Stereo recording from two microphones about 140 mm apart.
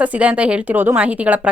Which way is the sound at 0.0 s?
10° right (ahead or behind).